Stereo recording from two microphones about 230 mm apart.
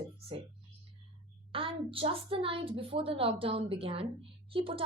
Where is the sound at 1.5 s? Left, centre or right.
Right.